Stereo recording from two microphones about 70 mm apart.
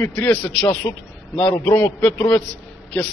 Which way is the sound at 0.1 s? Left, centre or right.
Left.